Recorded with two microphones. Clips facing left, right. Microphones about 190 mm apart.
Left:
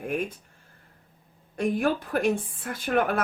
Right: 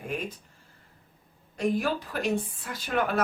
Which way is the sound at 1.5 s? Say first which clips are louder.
Left 2 dB; 55° left (ahead or behind).